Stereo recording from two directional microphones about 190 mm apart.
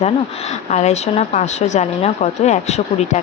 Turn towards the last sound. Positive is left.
turn(degrees=35)  # may be behind; listen again after turning